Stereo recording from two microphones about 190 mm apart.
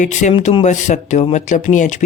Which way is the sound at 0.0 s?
40° left (ahead or behind).